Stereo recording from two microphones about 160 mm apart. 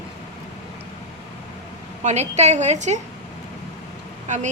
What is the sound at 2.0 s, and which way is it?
A woman's voice, 45° right (ahead or behind).